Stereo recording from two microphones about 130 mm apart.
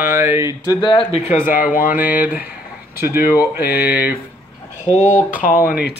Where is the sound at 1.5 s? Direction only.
90° left.